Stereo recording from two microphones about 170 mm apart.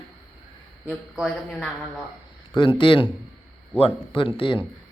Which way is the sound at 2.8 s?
30° left (ahead or behind).